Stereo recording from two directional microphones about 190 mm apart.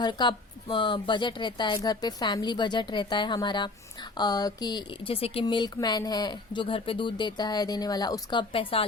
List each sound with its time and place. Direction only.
0.0 s speech: 25° left (ahead or behind)